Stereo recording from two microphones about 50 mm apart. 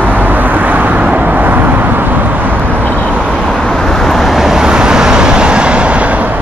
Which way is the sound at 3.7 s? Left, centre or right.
Centre.